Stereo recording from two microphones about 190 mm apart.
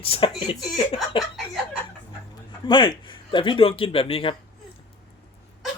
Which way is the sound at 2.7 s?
25° left (ahead or behind).